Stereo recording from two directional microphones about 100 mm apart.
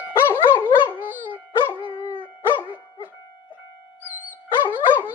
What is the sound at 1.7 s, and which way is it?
Dog, 55° left (ahead or behind).